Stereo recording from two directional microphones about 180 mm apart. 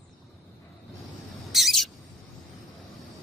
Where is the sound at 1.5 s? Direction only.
Centre (ahead or behind).